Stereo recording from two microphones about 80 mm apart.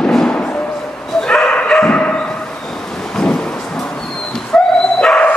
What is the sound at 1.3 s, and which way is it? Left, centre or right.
Bow-wow, centre.